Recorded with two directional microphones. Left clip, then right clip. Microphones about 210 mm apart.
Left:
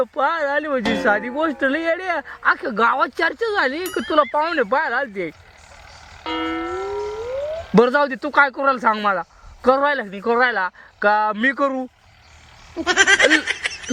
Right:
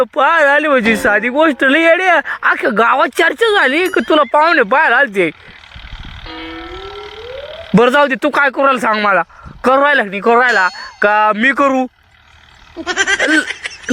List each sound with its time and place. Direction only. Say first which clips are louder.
0.0 s speech: right 9 dB; 20° right (ahead or behind)
7.8 s speech: right 6 dB; 15° right (ahead or behind)
12.7 s goat: even; centre (ahead or behind)